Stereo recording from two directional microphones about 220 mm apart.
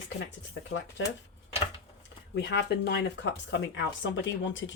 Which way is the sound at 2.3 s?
50° left (ahead or behind).